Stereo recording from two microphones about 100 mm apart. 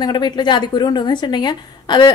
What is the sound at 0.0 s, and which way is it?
Speech, 50° left (ahead or behind).